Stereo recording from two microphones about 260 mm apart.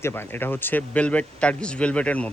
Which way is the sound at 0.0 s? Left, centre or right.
Centre.